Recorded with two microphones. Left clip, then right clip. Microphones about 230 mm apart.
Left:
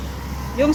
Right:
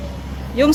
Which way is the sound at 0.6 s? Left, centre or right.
Centre.